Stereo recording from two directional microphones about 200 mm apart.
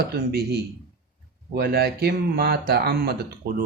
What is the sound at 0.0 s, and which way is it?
Speech, 50° right (ahead or behind).